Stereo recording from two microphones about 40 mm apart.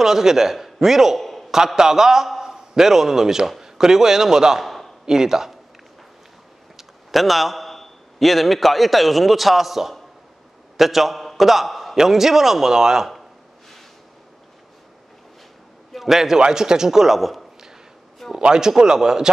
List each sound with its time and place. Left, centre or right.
0.0 s a man's voice: centre
4.6 s a sound: centre
5.0 s a man's voice: centre
6.8 s a man's voice: centre
15.9 s a sound: centre
16.3 s a man's voice: centre
18.4 s a man's voice: centre